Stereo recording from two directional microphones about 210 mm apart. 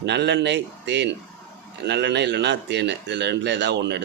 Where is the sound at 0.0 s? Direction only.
55° right (ahead or behind).